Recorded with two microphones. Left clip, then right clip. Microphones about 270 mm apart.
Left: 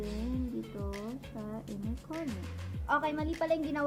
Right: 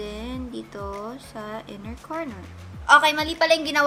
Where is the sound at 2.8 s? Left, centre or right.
Centre.